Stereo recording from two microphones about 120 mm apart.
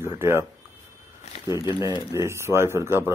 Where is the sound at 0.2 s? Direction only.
20° right (ahead or behind).